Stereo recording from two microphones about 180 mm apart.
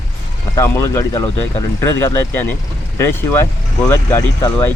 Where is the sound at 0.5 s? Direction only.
15° left (ahead or behind).